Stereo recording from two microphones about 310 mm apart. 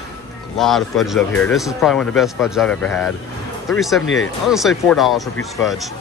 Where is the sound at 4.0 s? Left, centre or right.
Left.